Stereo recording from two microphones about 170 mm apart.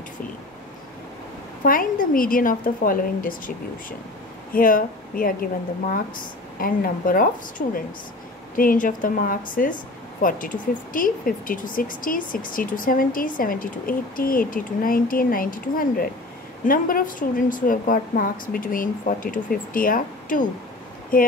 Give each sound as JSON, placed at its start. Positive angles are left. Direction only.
{"t": 1.6, "sound": "speech", "side_deg": 55}
{"t": 4.6, "sound": "speech", "side_deg": 55}
{"t": 6.6, "sound": "a woman's voice", "side_deg": 55}